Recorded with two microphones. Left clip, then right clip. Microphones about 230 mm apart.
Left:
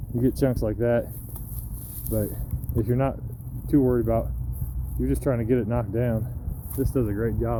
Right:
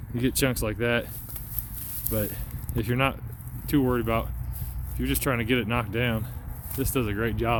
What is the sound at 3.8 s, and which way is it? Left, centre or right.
Speech, centre.